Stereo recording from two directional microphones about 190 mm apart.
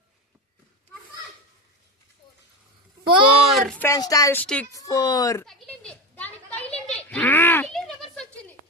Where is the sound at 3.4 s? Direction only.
Centre (ahead or behind).